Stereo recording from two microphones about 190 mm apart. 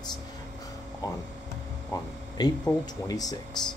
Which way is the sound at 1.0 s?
20° left (ahead or behind).